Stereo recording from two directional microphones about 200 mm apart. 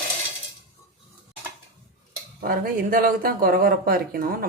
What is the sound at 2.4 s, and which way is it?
Speech, 45° right (ahead or behind).